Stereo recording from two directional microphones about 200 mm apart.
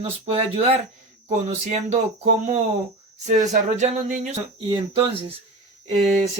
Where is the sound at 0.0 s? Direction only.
30° right (ahead or behind).